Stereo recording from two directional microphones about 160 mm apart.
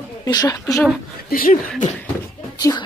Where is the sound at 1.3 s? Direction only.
65° left (ahead or behind).